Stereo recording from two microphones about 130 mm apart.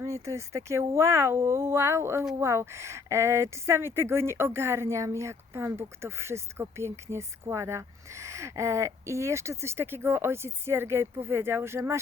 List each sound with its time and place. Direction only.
0.0 s speech: 25° right (ahead or behind)